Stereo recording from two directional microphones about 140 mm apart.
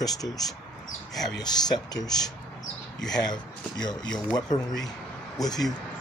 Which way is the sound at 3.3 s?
30° left (ahead or behind).